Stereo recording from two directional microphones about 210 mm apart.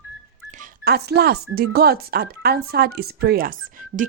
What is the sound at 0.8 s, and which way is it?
Speech, 50° right (ahead or behind).